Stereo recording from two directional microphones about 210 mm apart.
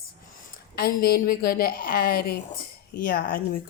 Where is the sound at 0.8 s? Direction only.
45° left (ahead or behind).